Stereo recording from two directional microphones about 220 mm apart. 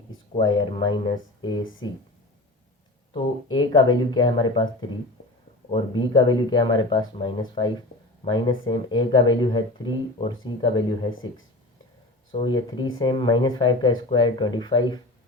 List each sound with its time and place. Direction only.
0.3 s speech: 20° left (ahead or behind)
3.1 s speech: 20° left (ahead or behind)
12.3 s speech: 20° left (ahead or behind)